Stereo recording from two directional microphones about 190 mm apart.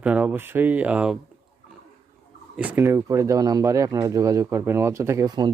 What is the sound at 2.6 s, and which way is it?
Speech, 10° right (ahead or behind).